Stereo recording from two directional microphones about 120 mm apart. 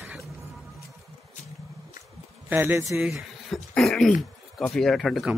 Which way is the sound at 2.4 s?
20° right (ahead or behind).